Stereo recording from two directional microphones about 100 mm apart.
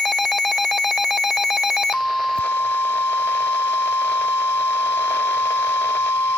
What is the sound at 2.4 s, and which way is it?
Alarm clock, 20° left (ahead or behind).